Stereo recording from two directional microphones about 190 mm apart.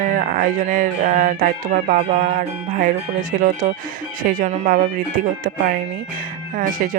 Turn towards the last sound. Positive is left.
turn(degrees=-45)  # may be behind; listen again after turning